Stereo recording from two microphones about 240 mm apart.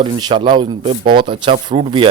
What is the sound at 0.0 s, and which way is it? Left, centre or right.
Speech, centre.